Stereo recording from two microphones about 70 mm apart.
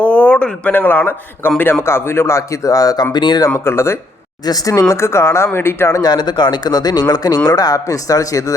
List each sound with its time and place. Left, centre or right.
0.0 s speech: centre; by 3.4 s left
3.6 s speech: left
4.4 s speech: left
6.0 s speech: left